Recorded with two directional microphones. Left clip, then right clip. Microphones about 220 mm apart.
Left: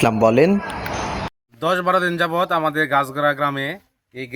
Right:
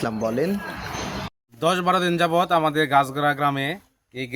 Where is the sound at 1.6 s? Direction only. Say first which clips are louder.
Left 2 dB; centre (ahead or behind).